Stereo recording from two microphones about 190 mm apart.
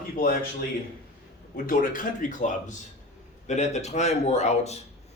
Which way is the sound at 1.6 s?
45° left (ahead or behind).